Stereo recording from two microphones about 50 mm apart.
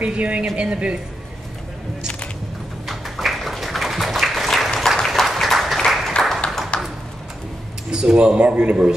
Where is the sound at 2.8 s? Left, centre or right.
Centre.